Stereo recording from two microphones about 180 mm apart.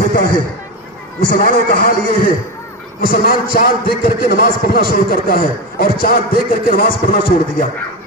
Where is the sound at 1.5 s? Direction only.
55° left (ahead or behind).